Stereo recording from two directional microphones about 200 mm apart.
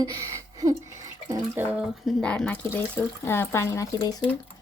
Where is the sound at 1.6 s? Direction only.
10° right (ahead or behind).